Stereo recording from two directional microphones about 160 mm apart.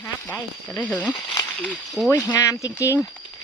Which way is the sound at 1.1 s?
30° left (ahead or behind).